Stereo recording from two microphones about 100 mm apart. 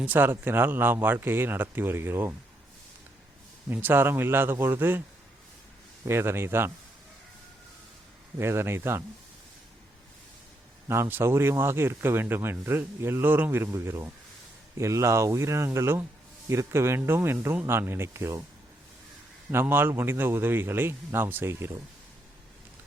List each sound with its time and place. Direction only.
0.0 s speech: 20° right (ahead or behind)
3.7 s speech: 20° right (ahead or behind)
6.1 s speech: 25° right (ahead or behind)
8.4 s speech: 25° right (ahead or behind)
10.8 s speech: 25° right (ahead or behind)
19.5 s speech: 25° right (ahead or behind)